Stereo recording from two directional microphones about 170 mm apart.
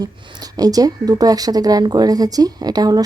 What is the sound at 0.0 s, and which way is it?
Speech, 25° right (ahead or behind).